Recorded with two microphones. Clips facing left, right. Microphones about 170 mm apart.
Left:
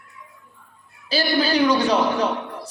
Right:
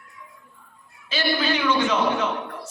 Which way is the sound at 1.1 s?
35° left (ahead or behind).